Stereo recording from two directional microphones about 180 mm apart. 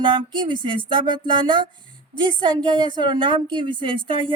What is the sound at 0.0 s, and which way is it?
A woman's voice, 25° right (ahead or behind).